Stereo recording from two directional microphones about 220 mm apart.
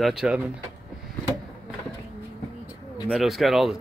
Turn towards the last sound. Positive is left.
turn(degrees=0)  # may be behind; listen again after turning